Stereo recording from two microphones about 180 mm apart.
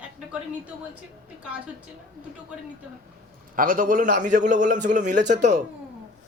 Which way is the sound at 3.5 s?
50° right (ahead or behind).